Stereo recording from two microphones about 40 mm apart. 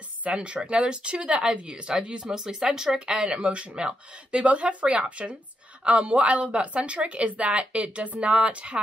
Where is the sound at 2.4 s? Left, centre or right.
Centre; by 8.8 s right.